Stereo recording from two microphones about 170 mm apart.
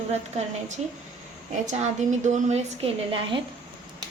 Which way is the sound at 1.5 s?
45° right (ahead or behind).